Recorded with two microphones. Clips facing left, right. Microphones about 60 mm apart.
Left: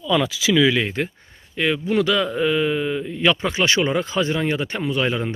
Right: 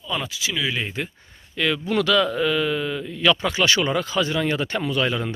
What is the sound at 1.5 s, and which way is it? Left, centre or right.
Speech, left.